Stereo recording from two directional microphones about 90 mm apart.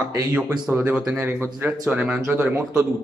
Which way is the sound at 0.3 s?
10° right (ahead or behind).